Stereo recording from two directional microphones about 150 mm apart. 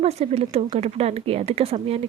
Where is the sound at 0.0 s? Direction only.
45° right (ahead or behind).